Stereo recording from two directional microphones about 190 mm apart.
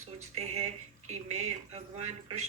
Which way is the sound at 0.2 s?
35° right (ahead or behind).